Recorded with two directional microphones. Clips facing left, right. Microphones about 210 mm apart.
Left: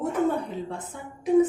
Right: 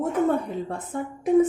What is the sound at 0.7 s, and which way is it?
Speech, 50° right (ahead or behind).